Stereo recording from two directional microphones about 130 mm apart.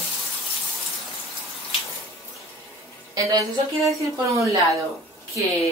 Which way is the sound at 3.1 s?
25° right (ahead or behind).